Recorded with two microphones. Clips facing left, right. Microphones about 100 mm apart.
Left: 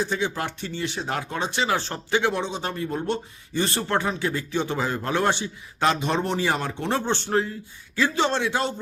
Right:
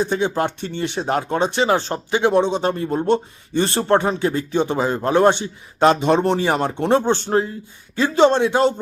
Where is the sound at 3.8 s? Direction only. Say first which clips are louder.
Right 10 dB; 35° right (ahead or behind).